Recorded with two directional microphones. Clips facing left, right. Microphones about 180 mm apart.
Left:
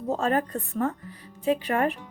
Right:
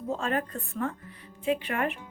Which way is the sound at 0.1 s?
40° left (ahead or behind).